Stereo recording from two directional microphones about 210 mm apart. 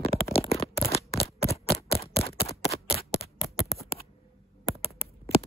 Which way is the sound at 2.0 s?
30° left (ahead or behind).